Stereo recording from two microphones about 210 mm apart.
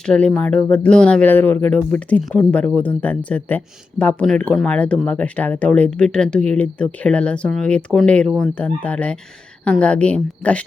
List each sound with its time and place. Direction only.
0.0 s speech: 5° left (ahead or behind)